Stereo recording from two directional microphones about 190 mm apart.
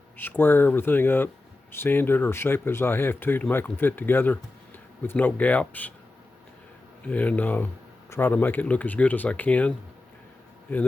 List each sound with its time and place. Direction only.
0.2 s speech: 10° left (ahead or behind)
7.0 s speech: 5° left (ahead or behind)